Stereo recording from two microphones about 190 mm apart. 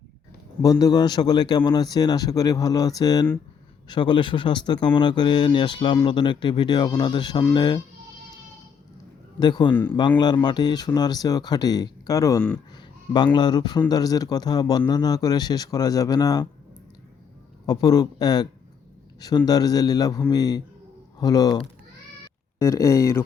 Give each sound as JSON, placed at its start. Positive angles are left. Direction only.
{"t": 0.6, "sound": "a man's voice", "side_deg": 20}
{"t": 9.4, "sound": "a man's voice", "side_deg": 25}
{"t": 17.7, "sound": "a man's voice", "side_deg": 20}
{"t": 19.5, "sound": "a man's voice", "side_deg": 20}